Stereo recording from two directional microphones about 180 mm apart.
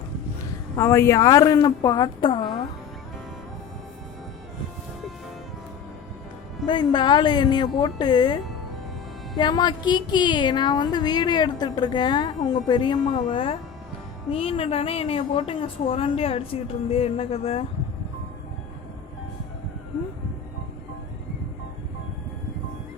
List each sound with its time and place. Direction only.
0.8 s speech: 15° left (ahead or behind)
6.7 s speech: 25° left (ahead or behind)
9.4 s a woman's voice: 25° left (ahead or behind)